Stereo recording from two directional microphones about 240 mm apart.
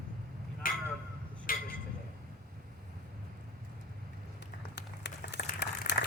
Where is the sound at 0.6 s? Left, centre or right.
Left.